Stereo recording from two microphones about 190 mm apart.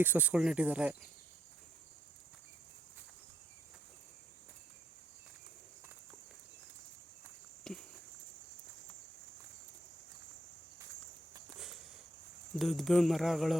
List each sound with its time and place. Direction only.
0.0 s speech: 10° right (ahead or behind)
7.7 s a sound: 5° left (ahead or behind)
12.5 s speech: centre (ahead or behind)